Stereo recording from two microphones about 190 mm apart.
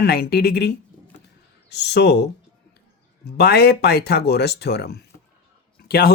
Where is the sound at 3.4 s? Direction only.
60° left (ahead or behind).